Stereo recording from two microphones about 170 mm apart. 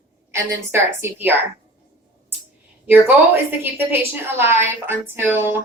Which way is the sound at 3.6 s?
10° right (ahead or behind).